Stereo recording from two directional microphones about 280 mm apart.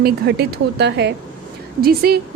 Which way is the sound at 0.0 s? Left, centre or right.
Right.